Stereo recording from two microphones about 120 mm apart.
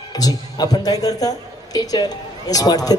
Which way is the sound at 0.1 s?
30° left (ahead or behind).